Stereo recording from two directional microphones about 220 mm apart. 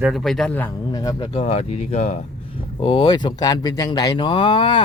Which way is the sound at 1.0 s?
20° left (ahead or behind).